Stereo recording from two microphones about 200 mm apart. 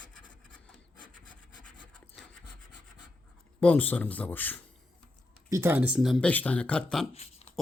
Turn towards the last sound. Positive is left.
turn(degrees=30)  # may be behind; listen again after turning